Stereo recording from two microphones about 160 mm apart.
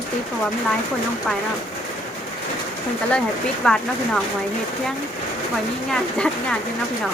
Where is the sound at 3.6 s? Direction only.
5° left (ahead or behind).